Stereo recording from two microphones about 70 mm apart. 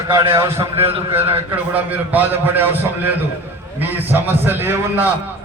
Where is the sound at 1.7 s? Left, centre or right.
Right.